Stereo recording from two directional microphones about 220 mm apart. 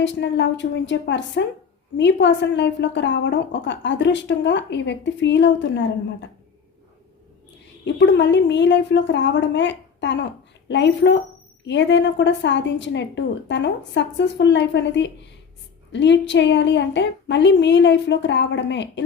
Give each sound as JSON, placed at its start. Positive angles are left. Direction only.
{"t": 0.0, "sound": "a woman's voice", "side_deg": 55}
{"t": 7.9, "sound": "a woman's voice", "side_deg": 55}